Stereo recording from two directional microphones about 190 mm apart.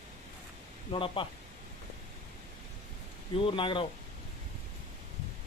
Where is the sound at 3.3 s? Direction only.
25° left (ahead or behind).